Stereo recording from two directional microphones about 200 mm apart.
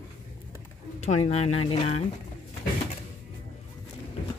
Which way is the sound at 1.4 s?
90° left.